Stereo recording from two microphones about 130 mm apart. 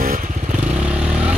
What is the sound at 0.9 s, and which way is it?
Vehicle, 10° right (ahead or behind).